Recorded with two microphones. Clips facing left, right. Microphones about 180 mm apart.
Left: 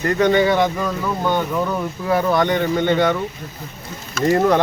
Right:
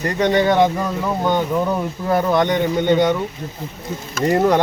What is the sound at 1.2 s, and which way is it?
Speech, 15° right (ahead or behind).